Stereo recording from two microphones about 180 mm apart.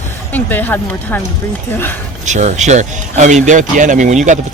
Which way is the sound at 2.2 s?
40° right (ahead or behind).